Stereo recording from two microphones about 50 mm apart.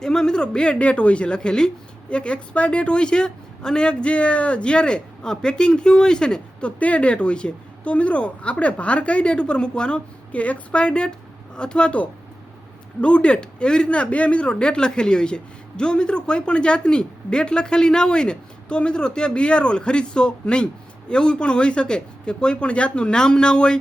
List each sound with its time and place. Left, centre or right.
0.0 s speech: centre